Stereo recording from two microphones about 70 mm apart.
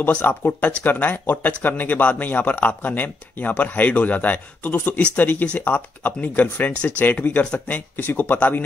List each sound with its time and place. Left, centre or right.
0.0 s speech: left